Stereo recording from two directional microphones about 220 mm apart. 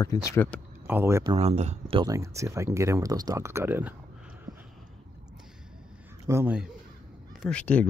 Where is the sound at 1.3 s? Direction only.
30° right (ahead or behind); by 3.9 s 10° right (ahead or behind).